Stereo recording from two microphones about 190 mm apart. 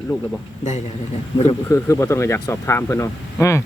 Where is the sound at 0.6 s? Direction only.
40° left (ahead or behind).